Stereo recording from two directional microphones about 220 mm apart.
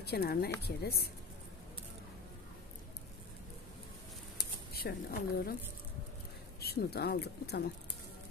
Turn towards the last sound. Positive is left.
turn(degrees=45)  # may be behind; listen again after turning